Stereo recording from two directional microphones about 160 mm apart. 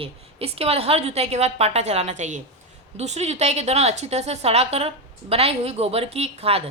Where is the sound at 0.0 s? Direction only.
40° right (ahead or behind).